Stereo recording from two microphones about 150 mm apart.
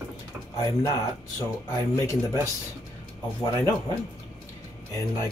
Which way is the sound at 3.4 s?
20° left (ahead or behind).